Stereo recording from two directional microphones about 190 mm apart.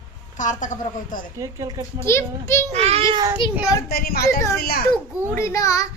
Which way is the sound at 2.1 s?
15° left (ahead or behind).